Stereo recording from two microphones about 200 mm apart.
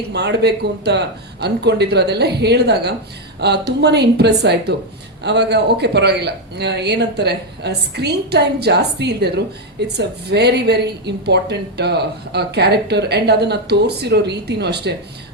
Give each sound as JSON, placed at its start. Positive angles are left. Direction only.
{"t": 0.1, "sound": "a woman's voice", "side_deg": -55}